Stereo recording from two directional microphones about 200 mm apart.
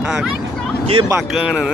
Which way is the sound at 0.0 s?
5° right (ahead or behind).